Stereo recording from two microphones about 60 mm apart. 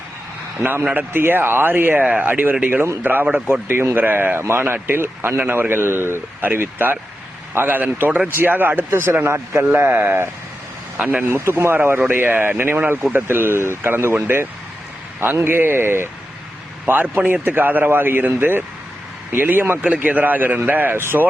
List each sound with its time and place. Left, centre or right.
0.6 s a man's voice: right
4.4 s a man's voice: right
10.9 s speech: right
11.2 s a man's voice: right
15.2 s a man's voice: right